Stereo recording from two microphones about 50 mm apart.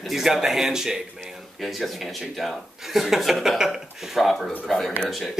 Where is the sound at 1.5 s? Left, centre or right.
Centre.